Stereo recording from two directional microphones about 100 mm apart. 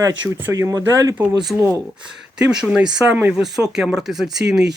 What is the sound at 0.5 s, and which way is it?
Speech, 35° right (ahead or behind).